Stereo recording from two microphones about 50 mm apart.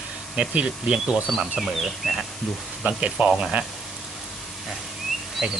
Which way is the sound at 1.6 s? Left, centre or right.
Centre.